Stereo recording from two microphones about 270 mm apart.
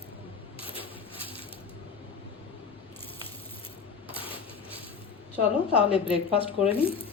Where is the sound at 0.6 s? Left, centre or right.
Centre.